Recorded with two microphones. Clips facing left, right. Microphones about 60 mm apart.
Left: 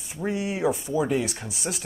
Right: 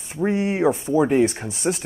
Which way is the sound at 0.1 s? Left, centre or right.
Right.